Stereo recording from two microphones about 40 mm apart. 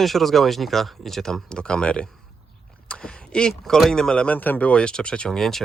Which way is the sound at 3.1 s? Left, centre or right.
Centre.